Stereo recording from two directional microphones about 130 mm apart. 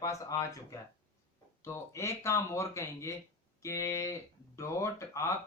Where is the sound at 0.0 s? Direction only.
25° left (ahead or behind).